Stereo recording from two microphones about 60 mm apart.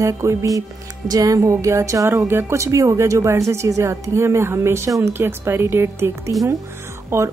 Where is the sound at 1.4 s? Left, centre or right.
Right.